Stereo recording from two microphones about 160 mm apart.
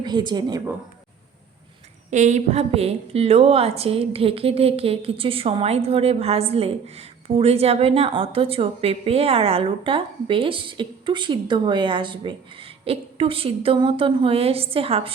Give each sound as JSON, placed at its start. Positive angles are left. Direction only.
{"t": 0.0, "sound": "a woman's voice", "side_deg": -30}
{"t": 2.0, "sound": "a woman's voice", "side_deg": -50}